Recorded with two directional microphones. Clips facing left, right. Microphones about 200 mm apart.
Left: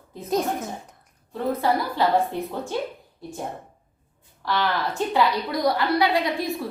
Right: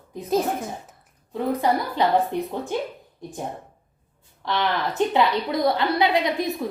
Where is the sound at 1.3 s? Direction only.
15° right (ahead or behind).